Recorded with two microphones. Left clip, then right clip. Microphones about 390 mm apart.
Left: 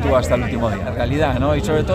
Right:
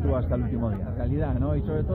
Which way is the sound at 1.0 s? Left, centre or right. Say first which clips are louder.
Left 12 dB; centre.